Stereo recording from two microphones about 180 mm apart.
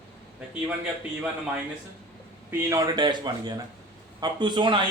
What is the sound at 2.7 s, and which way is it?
A man's voice, 20° right (ahead or behind).